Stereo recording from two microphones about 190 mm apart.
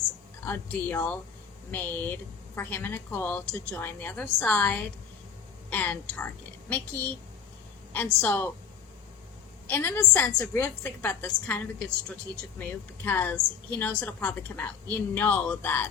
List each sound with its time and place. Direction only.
0.4 s a woman's voice: 10° left (ahead or behind)
9.6 s a woman's voice: 10° left (ahead or behind)